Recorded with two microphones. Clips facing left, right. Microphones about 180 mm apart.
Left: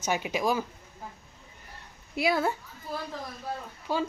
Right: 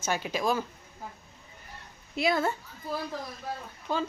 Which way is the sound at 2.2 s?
10° left (ahead or behind).